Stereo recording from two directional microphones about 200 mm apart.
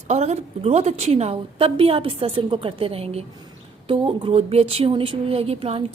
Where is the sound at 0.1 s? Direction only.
35° right (ahead or behind).